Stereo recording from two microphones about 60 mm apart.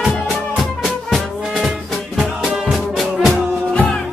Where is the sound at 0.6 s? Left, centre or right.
Centre.